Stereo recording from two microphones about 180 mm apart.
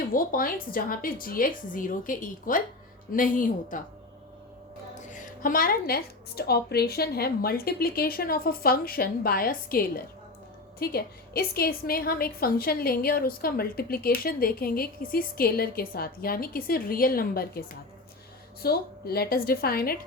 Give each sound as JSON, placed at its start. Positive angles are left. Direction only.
{"t": 0.1, "sound": "speech", "side_deg": 50}
{"t": 4.9, "sound": "a woman's voice", "side_deg": 45}